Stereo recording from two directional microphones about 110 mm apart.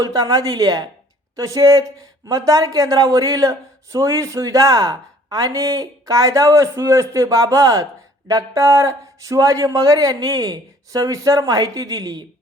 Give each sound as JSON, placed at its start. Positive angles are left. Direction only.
{"t": 0.0, "sound": "speech", "side_deg": -35}